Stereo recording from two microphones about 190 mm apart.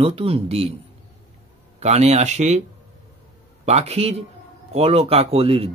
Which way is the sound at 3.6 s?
35° right (ahead or behind).